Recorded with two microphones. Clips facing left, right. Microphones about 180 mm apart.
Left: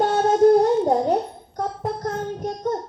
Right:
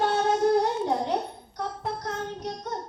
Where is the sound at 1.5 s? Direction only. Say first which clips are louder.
Left 6 dB; 45° left (ahead or behind).